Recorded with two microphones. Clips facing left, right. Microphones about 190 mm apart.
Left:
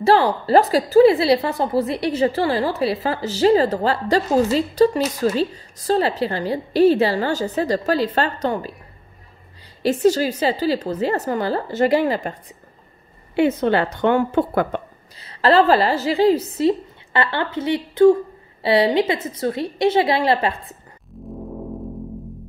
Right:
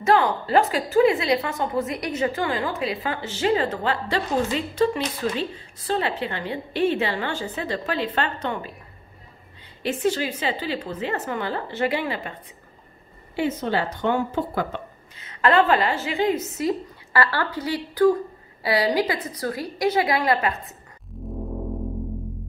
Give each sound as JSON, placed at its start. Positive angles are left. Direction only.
{"t": 0.0, "sound": "a woman's voice", "side_deg": 35}
{"t": 9.8, "sound": "a woman's voice", "side_deg": 40}
{"t": 13.4, "sound": "a woman's voice", "side_deg": 65}
{"t": 15.1, "sound": "a woman's voice", "side_deg": 35}